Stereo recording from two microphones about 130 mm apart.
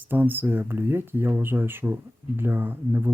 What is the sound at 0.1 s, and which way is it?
Speech, 15° right (ahead or behind).